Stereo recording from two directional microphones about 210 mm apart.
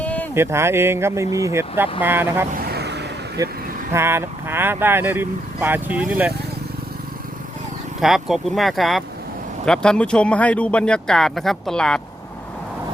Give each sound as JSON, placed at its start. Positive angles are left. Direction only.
{"t": 0.0, "sound": "a sound", "side_deg": 5}
{"t": 0.3, "sound": "speech", "side_deg": -10}
{"t": 2.6, "sound": "vehicle", "side_deg": -50}
{"t": 3.9, "sound": "speech", "side_deg": -10}
{"t": 8.0, "sound": "speech", "side_deg": 0}